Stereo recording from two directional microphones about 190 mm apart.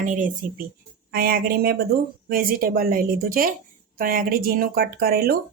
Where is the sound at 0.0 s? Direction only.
45° right (ahead or behind).